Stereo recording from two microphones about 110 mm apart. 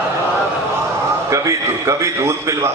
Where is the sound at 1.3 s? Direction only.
30° right (ahead or behind).